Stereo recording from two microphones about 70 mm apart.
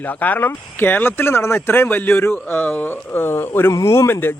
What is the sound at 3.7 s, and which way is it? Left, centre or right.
Speech, left.